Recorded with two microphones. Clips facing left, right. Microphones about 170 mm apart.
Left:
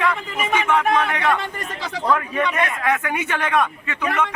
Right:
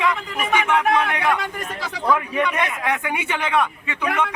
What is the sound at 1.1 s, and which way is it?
A man's voice, 10° right (ahead or behind).